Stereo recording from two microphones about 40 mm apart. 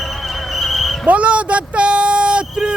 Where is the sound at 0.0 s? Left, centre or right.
Centre.